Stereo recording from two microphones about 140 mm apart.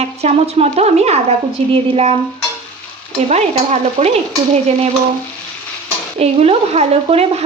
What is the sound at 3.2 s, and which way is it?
Speech, 50° right (ahead or behind).